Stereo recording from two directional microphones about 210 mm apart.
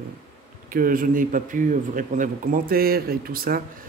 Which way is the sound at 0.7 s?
40° right (ahead or behind).